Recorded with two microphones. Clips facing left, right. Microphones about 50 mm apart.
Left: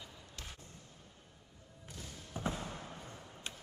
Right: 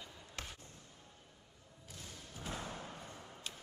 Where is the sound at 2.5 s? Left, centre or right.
Centre.